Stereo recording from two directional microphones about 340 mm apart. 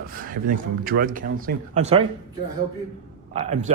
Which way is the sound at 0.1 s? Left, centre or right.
Right.